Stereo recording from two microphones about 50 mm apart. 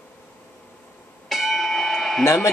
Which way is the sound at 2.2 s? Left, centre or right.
Left.